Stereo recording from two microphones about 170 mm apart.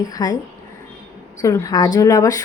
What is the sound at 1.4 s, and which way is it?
A woman's voice, 20° left (ahead or behind).